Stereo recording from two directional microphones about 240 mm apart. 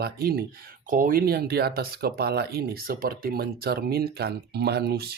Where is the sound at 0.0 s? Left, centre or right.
Right.